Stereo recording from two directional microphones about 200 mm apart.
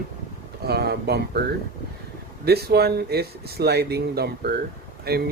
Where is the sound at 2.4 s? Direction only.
50° right (ahead or behind).